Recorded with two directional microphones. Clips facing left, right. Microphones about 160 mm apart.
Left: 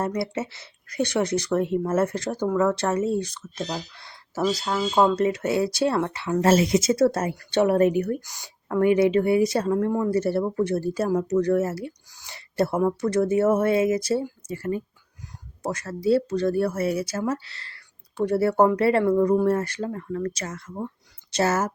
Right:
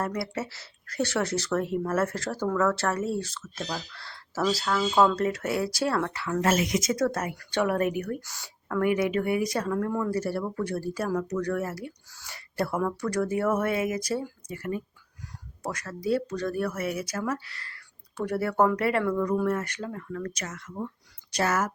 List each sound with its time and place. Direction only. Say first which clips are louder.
0.0 s speech: left 4 dB; 20° left (ahead or behind)